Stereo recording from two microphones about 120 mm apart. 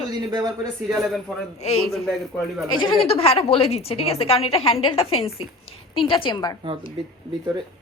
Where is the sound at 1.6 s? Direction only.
65° left (ahead or behind).